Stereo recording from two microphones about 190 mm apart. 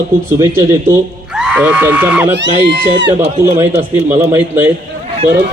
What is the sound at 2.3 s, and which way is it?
Speech, 70° right (ahead or behind).